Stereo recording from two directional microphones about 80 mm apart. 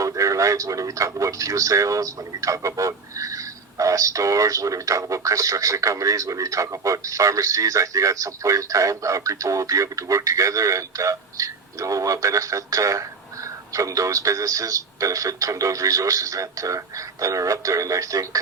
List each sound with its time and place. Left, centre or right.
0.0 s a man's voice: right